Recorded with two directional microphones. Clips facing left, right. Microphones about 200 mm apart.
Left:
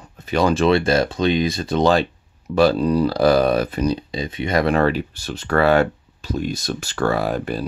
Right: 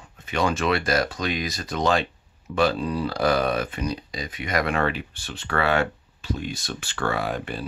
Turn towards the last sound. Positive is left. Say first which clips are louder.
# left 6 dB
turn(degrees=40)  # may be behind; listen again after turning